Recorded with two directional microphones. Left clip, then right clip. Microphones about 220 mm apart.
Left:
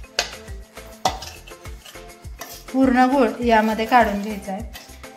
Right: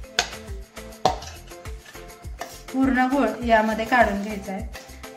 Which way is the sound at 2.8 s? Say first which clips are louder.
Left 4 dB; 25° left (ahead or behind).